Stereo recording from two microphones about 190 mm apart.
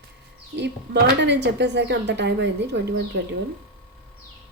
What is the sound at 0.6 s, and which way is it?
Speech, 65° right (ahead or behind).